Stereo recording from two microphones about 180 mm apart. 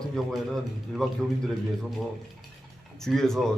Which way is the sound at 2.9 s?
Centre (ahead or behind).